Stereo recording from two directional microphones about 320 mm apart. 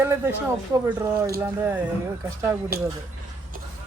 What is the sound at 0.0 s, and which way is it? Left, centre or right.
Speech, centre.